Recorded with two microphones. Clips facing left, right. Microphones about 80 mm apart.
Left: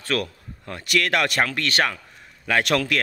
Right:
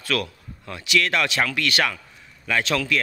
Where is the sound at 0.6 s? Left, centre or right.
Left.